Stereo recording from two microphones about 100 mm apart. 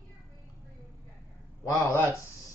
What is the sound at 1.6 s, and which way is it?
Speech, 30° left (ahead or behind).